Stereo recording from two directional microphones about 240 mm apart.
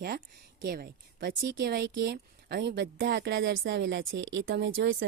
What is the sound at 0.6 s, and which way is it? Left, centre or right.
A woman's voice, right.